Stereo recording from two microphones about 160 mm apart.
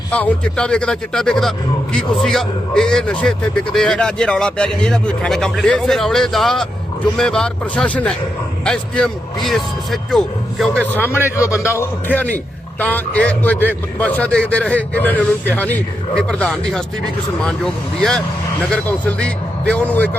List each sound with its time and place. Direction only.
0.1 s a man's voice: 10° left (ahead or behind)
10.9 s a man's voice: 15° left (ahead or behind)
18.7 s a man's voice: 5° left (ahead or behind)